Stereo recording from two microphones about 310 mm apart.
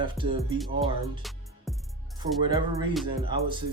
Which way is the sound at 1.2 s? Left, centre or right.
Centre.